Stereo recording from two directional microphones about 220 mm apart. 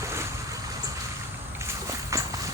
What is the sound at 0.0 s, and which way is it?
Boat, 15° right (ahead or behind).